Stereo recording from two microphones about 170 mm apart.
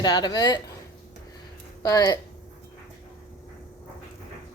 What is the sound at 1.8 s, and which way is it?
Speech, 25° left (ahead or behind).